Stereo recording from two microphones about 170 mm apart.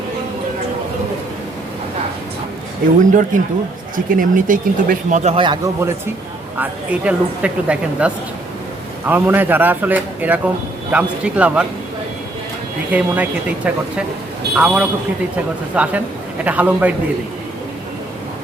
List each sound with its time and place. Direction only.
3.1 s speech: 50° right (ahead or behind); by 5.7 s 25° right (ahead or behind)
6.6 s a woman's voice: 5° right (ahead or behind)
12.9 s a woman's voice: 10° right (ahead or behind)